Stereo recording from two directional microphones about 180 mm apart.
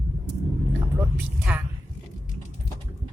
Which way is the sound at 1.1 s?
10° right (ahead or behind).